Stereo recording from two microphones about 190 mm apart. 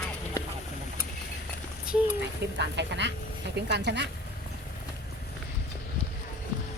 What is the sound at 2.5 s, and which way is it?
Speech, 65° right (ahead or behind).